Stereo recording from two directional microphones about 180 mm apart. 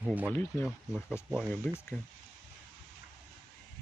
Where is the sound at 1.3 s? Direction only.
Centre (ahead or behind).